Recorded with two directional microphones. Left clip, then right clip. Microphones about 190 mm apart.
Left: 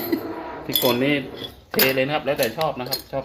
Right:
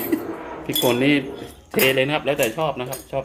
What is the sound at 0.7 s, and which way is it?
Speech, 20° right (ahead or behind).